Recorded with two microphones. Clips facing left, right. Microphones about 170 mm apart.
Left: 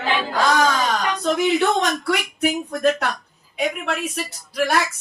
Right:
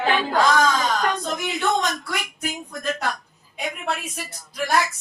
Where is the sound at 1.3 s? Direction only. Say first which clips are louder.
Left 5 dB; 75° left (ahead or behind).